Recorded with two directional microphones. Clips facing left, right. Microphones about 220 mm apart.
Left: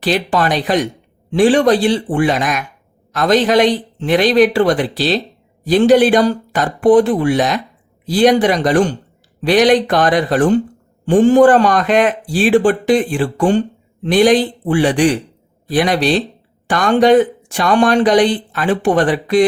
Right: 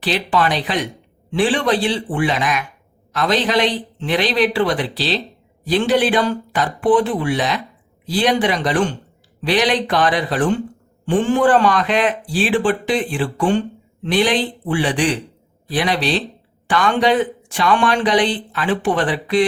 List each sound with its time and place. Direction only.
0.0 s speech: 45° left (ahead or behind)